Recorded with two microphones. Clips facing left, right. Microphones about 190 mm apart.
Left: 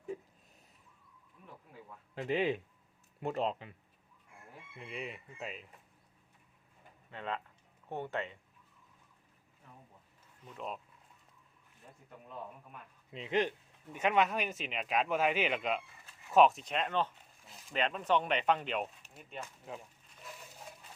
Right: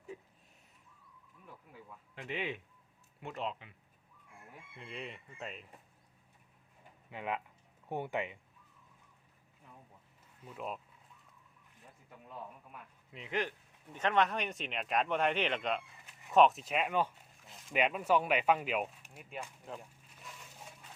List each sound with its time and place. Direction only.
2.1 s speech: 35° left (ahead or behind)
4.8 s speech: 5° left (ahead or behind)
7.1 s speech: 15° right (ahead or behind)
10.4 s speech: 5° right (ahead or behind)
13.1 s speech: 20° left (ahead or behind)
13.9 s speech: 10° left (ahead or behind); by 19.5 s 10° right (ahead or behind)
19.7 s speech: 5° left (ahead or behind)